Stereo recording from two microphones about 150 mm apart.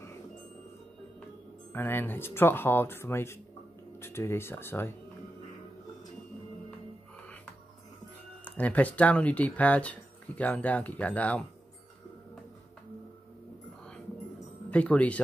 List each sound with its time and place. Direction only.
1.7 s speech: 15° left (ahead or behind)
8.5 s speech: 10° left (ahead or behind)
14.7 s speech: 10° left (ahead or behind)